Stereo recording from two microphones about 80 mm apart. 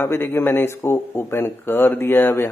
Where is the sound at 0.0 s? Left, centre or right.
Left.